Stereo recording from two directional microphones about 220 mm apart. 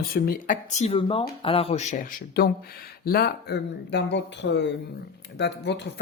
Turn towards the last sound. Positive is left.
turn(degrees=50)  # may be behind; listen again after turning